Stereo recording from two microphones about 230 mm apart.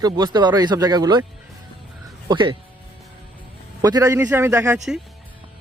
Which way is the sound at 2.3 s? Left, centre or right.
Right.